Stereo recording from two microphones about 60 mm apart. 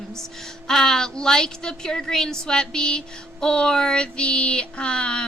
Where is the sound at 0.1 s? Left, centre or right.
Centre.